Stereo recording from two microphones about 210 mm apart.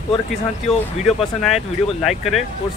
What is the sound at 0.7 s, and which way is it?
Speech, centre (ahead or behind).